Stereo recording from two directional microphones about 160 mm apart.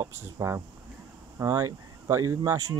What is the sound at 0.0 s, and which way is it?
Speech, 15° right (ahead or behind).